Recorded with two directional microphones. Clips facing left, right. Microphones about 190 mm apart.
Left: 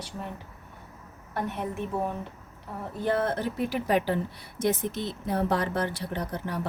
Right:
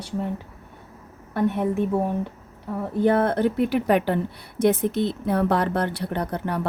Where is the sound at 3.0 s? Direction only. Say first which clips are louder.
Right 7 dB; 60° right (ahead or behind).